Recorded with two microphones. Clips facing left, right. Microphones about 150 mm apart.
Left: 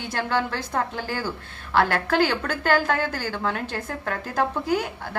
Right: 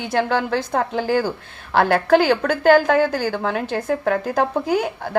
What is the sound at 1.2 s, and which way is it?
Speech, 45° right (ahead or behind).